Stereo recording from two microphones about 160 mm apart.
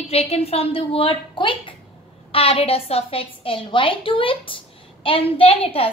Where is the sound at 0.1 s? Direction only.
40° left (ahead or behind).